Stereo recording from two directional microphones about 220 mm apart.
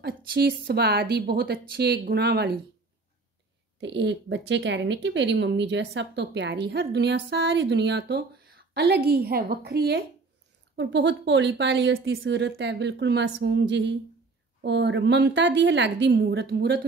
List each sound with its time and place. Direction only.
0.0 s speech: 45° right (ahead or behind)
3.8 s speech: 55° right (ahead or behind)